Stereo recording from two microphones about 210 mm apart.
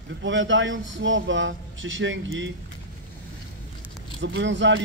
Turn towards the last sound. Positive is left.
turn(degrees=-60)  # may be behind; listen again after turning